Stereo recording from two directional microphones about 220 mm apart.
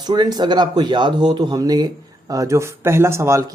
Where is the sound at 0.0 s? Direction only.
20° right (ahead or behind).